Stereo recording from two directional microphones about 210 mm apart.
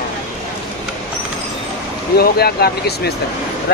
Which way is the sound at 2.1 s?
50° left (ahead or behind).